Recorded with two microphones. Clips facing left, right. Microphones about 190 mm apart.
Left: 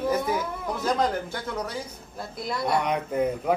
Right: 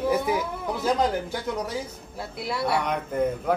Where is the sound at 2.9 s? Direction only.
10° left (ahead or behind).